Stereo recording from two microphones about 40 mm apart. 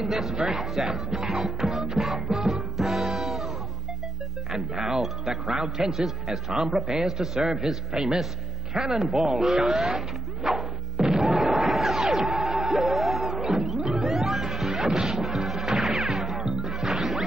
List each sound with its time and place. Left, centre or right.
0.1 s speech: centre
2.2 s music: centre
4.5 s a man's voice: centre
6.5 s a man's voice: centre
9.2 s music: centre
13.4 s music: centre
15.0 s smash: centre
15.8 s music: centre